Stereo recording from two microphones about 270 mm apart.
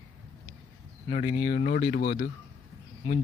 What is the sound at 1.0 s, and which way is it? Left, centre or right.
Speech, left.